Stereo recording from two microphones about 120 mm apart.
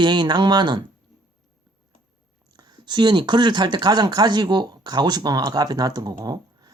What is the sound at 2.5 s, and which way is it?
Speech, 35° right (ahead or behind).